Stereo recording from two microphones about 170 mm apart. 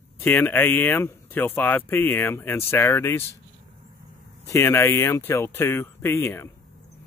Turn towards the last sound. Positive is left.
turn(degrees=15)  # may be behind; listen again after turning